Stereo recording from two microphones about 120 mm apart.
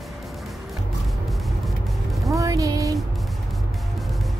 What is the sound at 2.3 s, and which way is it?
Speech, 30° right (ahead or behind).